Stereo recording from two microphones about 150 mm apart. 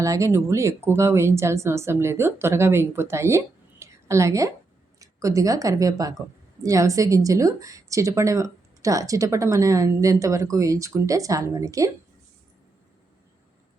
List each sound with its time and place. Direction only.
0.0 s a woman's voice: 20° right (ahead or behind)